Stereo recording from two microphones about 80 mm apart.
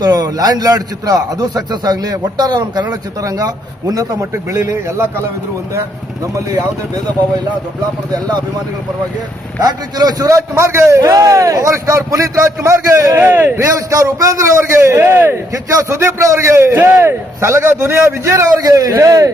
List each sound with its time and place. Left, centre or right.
0.0 s a man's voice: right
6.3 s a man's voice: right
8.1 s a man's voice: right
9.6 s a man's voice: right
13.1 s a man's voice: right
13.6 s a man's voice: right
15.7 s a man's voice: right
18.6 s a man's voice: right